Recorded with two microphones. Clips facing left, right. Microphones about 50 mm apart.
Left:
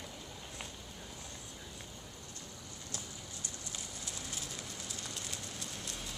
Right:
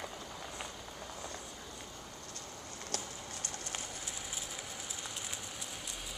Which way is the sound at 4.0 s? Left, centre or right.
Centre.